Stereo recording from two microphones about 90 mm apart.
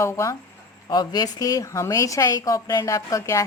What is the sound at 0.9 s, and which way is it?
A woman's voice, 45° left (ahead or behind).